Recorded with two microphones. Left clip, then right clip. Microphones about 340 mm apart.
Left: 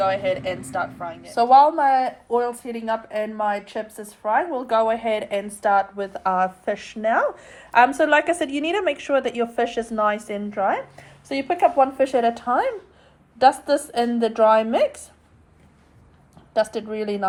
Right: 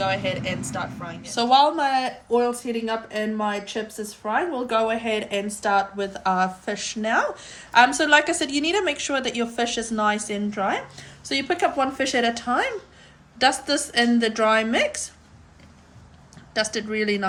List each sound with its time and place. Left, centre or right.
0.0 s speech: centre
1.4 s speech: centre
16.9 s speech: centre